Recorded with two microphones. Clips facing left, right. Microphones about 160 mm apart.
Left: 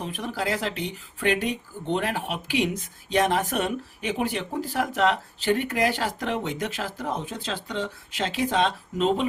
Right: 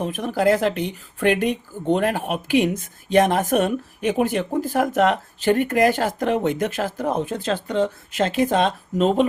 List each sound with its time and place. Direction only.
0.0 s speech: 45° right (ahead or behind)